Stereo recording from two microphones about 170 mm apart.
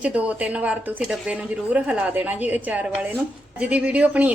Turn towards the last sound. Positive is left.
turn(degrees=-10)  # may be behind; listen again after turning